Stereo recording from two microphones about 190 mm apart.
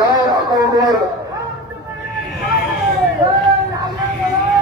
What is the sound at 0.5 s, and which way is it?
Speech, 20° right (ahead or behind).